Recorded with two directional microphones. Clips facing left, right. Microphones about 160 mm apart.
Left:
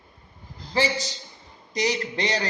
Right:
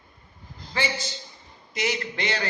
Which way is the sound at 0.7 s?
35° left (ahead or behind).